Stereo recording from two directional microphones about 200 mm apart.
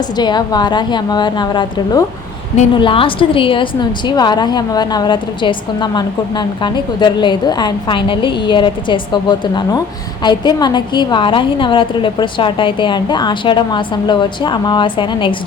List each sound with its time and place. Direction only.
0.2 s a woman's voice: 20° left (ahead or behind)